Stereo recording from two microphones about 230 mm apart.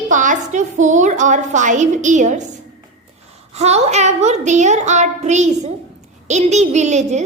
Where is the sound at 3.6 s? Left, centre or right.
Right.